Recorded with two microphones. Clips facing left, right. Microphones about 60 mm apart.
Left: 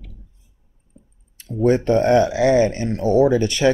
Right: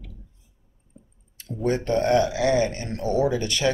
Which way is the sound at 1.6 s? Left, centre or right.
Left.